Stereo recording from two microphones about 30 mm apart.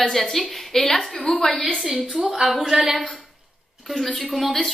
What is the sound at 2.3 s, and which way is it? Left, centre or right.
Speech, centre.